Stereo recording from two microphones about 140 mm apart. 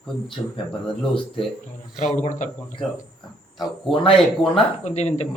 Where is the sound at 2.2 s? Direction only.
60° left (ahead or behind).